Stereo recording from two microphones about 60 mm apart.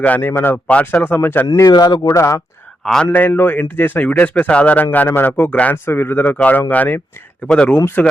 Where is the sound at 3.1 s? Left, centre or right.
Left.